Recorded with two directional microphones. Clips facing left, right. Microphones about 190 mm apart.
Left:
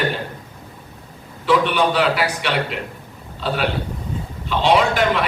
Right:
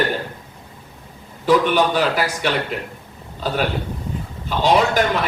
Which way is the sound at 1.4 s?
40° right (ahead or behind).